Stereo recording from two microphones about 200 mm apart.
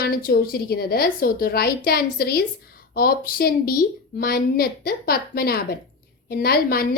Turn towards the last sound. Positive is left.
turn(degrees=50)  # may be behind; listen again after turning